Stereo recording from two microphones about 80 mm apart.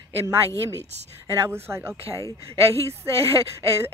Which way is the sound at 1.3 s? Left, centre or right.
Right.